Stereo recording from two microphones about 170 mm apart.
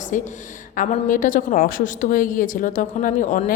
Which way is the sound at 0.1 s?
50° left (ahead or behind).